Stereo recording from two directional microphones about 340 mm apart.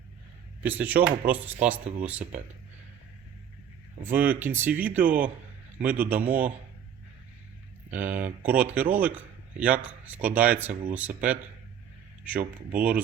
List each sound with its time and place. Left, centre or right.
0.6 s a man's voice: centre
1.8 s speech: right
2.0 s a man's voice: centre
4.0 s a man's voice: centre
7.9 s a man's voice: centre
12.2 s a man's voice: centre